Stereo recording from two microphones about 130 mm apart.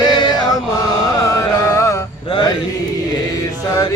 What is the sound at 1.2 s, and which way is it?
Music, 25° left (ahead or behind).